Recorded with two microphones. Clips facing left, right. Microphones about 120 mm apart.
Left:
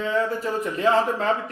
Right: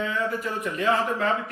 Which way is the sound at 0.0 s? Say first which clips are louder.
Left 3 dB; 30° left (ahead or behind).